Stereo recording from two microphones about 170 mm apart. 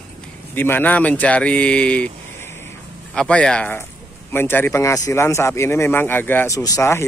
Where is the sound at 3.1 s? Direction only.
5° left (ahead or behind).